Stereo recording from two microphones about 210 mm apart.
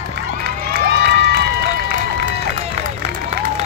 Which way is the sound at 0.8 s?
50° right (ahead or behind).